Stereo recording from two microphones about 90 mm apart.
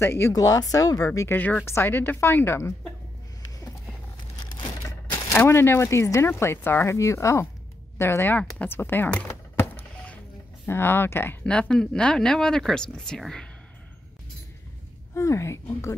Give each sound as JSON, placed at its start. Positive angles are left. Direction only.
{"t": 0.0, "sound": "speech", "side_deg": 30}
{"t": 0.3, "sound": "speech", "side_deg": 40}
{"t": 1.3, "sound": "speech", "side_deg": 20}
{"t": 5.3, "sound": "speech", "side_deg": 25}
{"t": 9.3, "sound": "a sound", "side_deg": 25}
{"t": 10.7, "sound": "speech", "side_deg": 25}
{"t": 11.7, "sound": "speech", "side_deg": 10}
{"t": 15.1, "sound": "speech", "side_deg": 35}